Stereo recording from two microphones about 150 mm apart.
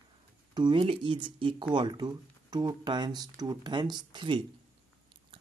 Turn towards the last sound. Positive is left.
turn(degrees=-30)  # may be behind; listen again after turning